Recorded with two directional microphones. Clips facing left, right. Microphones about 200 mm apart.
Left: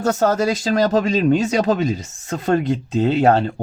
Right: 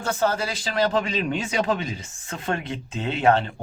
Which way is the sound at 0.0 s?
45° left (ahead or behind).